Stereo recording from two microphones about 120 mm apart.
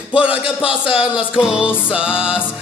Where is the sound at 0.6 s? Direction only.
45° left (ahead or behind).